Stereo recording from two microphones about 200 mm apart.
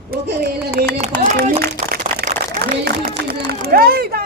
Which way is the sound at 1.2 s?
40° right (ahead or behind).